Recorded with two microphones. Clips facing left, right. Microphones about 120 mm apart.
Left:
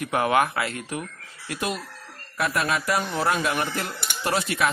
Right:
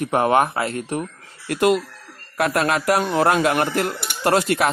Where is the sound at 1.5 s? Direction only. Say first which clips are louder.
Right 12 dB; 90° right.